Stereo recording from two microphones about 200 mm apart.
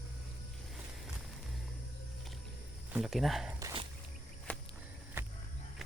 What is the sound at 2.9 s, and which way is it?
Speech, centre (ahead or behind).